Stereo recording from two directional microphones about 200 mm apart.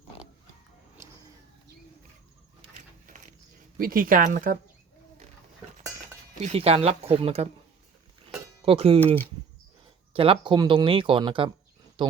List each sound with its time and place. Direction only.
3.8 s speech: 45° right (ahead or behind)
6.4 s speech: 30° right (ahead or behind)
8.6 s speech: 30° right (ahead or behind)
10.1 s speech: 25° right (ahead or behind)